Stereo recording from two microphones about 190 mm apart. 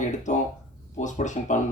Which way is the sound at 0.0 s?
40° left (ahead or behind).